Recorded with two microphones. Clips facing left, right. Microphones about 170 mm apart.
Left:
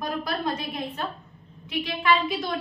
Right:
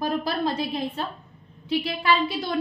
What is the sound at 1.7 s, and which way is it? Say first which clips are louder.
Speech: right 1 dB; 30° right (ahead or behind).